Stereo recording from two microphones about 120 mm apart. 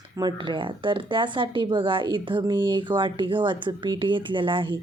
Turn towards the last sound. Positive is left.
turn(degrees=-45)  # may be behind; listen again after turning